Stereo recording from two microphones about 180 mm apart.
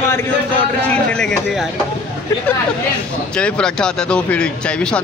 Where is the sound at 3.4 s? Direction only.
5° left (ahead or behind).